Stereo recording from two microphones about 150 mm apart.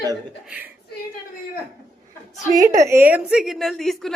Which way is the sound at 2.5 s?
25° right (ahead or behind).